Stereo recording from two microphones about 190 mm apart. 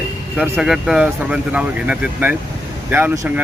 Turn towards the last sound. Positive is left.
turn(degrees=-15)  # may be behind; listen again after turning